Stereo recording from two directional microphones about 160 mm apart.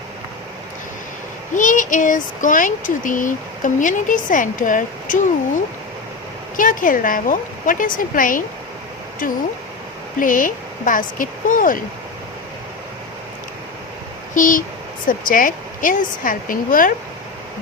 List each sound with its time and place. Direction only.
1.5 s speech: 55° left (ahead or behind)
6.6 s a woman's voice: 55° left (ahead or behind)
14.3 s a woman's voice: 55° left (ahead or behind)